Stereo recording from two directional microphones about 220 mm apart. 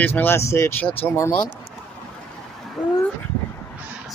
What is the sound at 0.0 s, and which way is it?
Speech, 10° left (ahead or behind).